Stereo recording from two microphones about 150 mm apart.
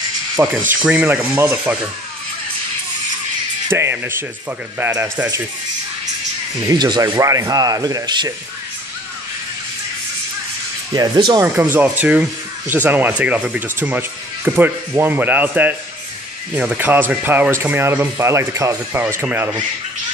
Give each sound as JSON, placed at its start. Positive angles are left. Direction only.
{"t": 0.7, "sound": "speech", "side_deg": -10}
{"t": 3.6, "sound": "speech", "side_deg": -15}
{"t": 6.6, "sound": "speech", "side_deg": -25}
{"t": 10.9, "sound": "speech", "side_deg": -30}
{"t": 11.4, "sound": "speech", "side_deg": -10}